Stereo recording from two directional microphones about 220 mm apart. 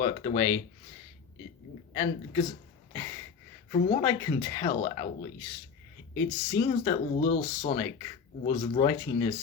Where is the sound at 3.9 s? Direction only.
15° left (ahead or behind).